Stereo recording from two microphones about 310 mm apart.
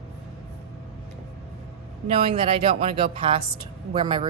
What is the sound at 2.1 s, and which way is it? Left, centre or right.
Speech, centre.